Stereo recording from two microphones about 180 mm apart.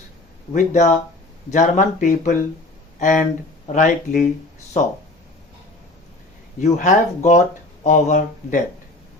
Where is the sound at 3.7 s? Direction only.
45° left (ahead or behind).